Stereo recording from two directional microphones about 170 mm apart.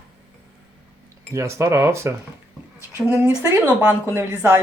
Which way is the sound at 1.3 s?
15° right (ahead or behind).